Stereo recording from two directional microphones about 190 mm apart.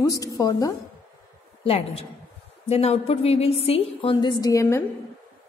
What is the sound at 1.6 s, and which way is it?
A woman's voice, 30° left (ahead or behind).